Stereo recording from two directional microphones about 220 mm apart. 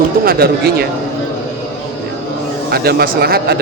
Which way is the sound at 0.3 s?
45° right (ahead or behind).